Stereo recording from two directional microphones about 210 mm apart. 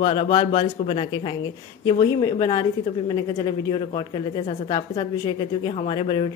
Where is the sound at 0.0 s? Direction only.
25° left (ahead or behind).